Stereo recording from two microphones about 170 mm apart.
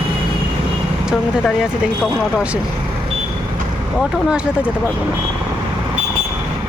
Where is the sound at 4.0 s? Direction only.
5° right (ahead or behind).